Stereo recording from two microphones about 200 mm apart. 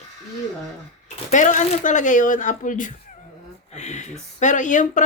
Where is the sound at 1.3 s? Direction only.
40° left (ahead or behind).